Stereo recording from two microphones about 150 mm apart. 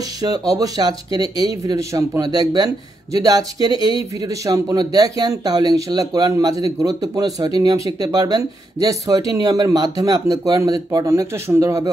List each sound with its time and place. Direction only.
0.2 s speech: 25° right (ahead or behind)